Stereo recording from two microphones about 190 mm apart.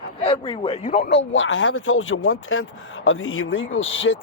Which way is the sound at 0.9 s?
55° left (ahead or behind).